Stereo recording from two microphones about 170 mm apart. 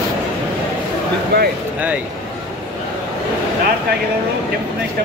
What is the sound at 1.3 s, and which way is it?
Speech, 70° right (ahead or behind).